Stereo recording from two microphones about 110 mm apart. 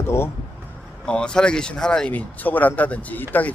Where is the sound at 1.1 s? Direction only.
5° left (ahead or behind).